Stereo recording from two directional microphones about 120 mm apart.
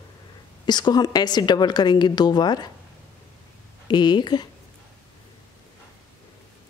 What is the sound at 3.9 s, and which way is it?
Speech, 35° left (ahead or behind).